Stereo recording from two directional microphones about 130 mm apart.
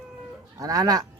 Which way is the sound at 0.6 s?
25° right (ahead or behind).